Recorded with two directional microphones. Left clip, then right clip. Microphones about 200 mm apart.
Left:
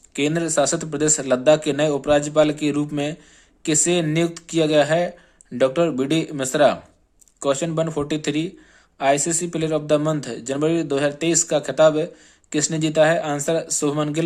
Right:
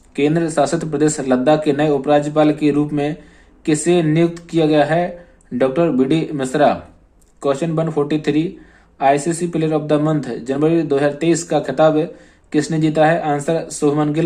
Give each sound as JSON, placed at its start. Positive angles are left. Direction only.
{"t": 0.2, "sound": "a man's voice", "side_deg": 25}